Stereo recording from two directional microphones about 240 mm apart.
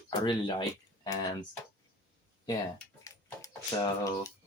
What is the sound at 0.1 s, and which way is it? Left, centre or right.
Speech, centre.